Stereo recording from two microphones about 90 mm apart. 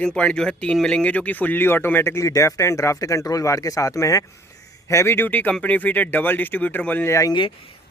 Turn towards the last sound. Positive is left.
turn(degrees=35)  # may be behind; listen again after turning